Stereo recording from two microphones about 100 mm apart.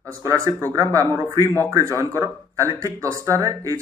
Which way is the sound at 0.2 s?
30° right (ahead or behind).